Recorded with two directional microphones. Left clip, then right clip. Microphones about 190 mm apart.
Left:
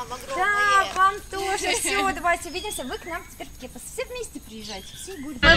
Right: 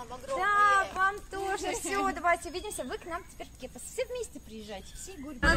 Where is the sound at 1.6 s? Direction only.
40° right (ahead or behind).